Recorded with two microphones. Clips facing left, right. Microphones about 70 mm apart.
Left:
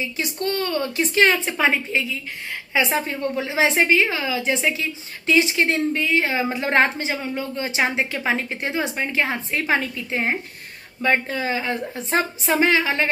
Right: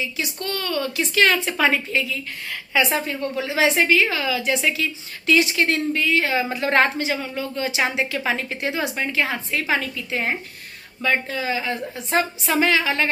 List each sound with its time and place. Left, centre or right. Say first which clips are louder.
0.0 s a woman's voice: left 2 dB; left